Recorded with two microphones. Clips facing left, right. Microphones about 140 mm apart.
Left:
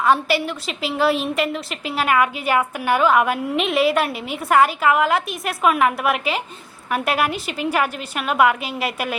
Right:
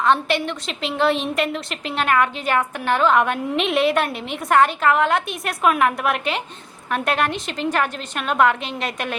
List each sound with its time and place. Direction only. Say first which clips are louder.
0.0 s a woman's voice: left 1 dB; 5° left (ahead or behind)